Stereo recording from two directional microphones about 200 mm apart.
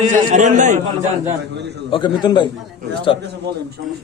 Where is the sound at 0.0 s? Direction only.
40° right (ahead or behind).